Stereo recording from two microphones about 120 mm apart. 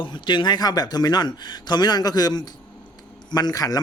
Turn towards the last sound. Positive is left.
turn(degrees=30)  # may be behind; listen again after turning